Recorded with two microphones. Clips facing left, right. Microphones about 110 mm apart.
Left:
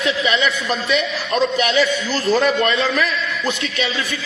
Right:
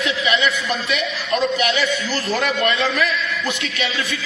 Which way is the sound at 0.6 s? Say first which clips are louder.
Left 3 dB; 30° left (ahead or behind).